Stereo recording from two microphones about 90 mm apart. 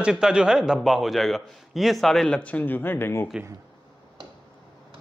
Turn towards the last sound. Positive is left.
turn(degrees=25)  # may be behind; listen again after turning